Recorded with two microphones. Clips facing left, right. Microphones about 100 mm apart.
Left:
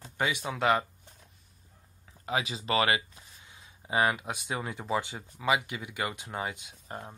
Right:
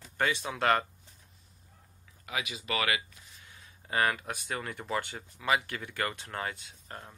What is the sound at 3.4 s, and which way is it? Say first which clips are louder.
Speech: left 3 dB; 15° left (ahead or behind).